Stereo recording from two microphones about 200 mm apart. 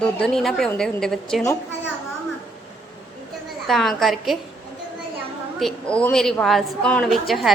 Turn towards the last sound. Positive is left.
turn(degrees=0)  # may be behind; listen again after turning